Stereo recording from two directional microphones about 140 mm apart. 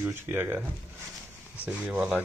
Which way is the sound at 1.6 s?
10° right (ahead or behind).